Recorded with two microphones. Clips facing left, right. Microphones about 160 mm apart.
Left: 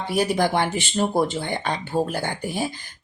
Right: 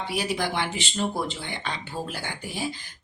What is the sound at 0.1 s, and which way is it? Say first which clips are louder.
Speech: left 8 dB; 50° left (ahead or behind).